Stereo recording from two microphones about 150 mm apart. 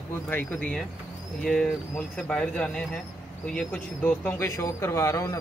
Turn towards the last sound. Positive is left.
turn(degrees=25)  # may be behind; listen again after turning